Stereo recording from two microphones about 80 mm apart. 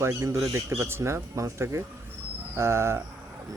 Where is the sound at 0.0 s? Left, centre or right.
Right.